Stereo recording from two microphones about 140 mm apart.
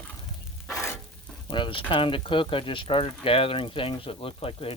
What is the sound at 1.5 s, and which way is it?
Speech, 35° left (ahead or behind).